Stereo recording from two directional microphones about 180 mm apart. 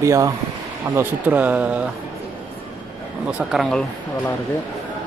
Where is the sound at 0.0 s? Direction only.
15° right (ahead or behind).